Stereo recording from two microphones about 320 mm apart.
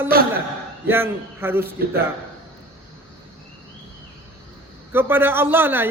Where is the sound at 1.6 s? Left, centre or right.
Right.